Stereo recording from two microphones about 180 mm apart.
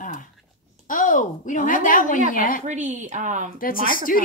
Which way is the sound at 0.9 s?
45° left (ahead or behind).